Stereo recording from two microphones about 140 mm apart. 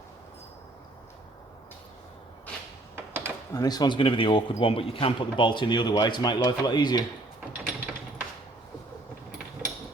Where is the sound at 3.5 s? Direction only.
25° left (ahead or behind).